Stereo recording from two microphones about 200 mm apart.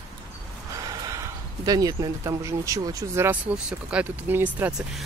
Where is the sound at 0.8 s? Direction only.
20° right (ahead or behind).